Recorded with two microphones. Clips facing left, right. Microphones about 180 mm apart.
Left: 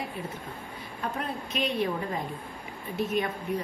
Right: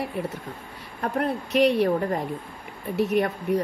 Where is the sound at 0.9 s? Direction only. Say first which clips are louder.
Right 8 dB; 65° right (ahead or behind).